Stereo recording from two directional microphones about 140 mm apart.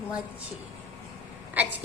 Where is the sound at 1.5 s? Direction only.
10° right (ahead or behind).